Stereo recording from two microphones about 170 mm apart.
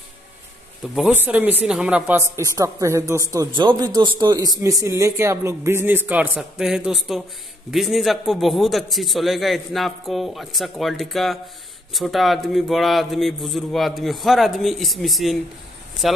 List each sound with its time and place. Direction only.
1.1 s a woman's voice: 10° right (ahead or behind)